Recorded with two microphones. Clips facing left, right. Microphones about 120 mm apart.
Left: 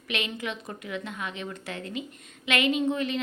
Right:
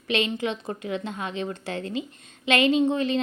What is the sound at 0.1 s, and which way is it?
A woman's voice, 30° right (ahead or behind).